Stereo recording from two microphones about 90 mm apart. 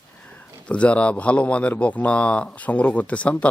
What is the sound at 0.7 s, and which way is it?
Speech, 15° left (ahead or behind).